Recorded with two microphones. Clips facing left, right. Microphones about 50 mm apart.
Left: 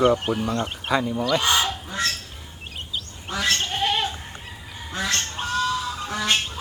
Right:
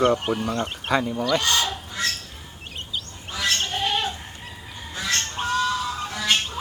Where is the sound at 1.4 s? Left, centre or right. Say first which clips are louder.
Left 2 dB; centre.